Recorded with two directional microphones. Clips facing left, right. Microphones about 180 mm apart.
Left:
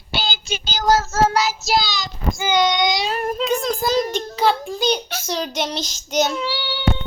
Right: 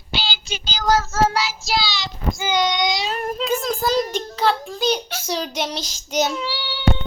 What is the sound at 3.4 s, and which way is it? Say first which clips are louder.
A child's voice: even; centre (ahead or behind).